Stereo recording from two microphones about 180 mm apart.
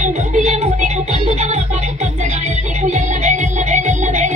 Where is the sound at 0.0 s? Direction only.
40° right (ahead or behind).